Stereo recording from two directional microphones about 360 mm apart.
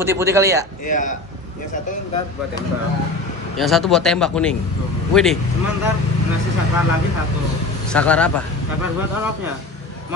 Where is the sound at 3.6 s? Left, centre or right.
Centre.